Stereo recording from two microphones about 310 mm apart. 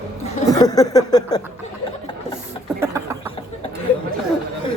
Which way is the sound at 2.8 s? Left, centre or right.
Centre.